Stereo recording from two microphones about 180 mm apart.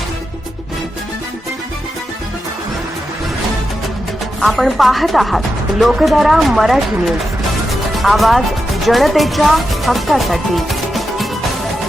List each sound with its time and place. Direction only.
4.4 s speech: centre (ahead or behind)
7.9 s speech: centre (ahead or behind)